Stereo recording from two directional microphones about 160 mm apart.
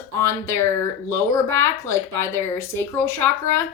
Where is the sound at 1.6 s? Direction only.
15° left (ahead or behind).